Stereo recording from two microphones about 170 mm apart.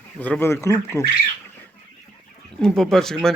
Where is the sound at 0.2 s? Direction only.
10° left (ahead or behind).